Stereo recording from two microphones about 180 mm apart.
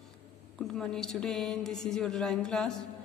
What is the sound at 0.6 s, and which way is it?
A man's voice, centre (ahead or behind).